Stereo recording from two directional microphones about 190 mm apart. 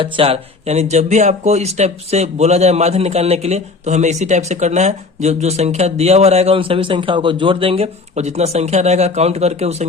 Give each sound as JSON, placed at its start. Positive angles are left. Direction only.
{"t": 0.0, "sound": "speech", "side_deg": -30}